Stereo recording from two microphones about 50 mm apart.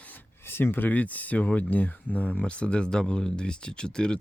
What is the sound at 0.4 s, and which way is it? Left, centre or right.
Speech, left.